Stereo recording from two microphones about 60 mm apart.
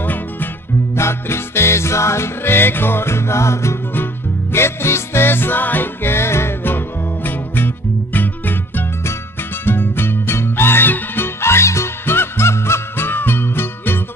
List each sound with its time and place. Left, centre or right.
0.0 s music: left
0.9 s music: left
3.9 s music: left